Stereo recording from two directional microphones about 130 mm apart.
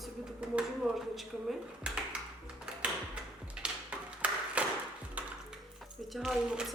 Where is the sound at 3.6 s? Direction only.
5° right (ahead or behind).